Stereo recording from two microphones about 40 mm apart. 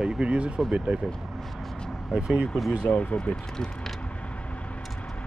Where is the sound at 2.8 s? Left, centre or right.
Left.